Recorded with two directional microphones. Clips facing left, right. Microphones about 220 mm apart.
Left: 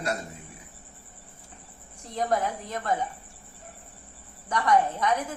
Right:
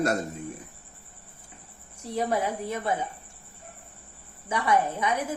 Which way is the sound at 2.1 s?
10° right (ahead or behind).